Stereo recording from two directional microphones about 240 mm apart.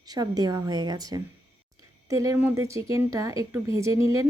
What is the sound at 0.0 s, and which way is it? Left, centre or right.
Speech, centre.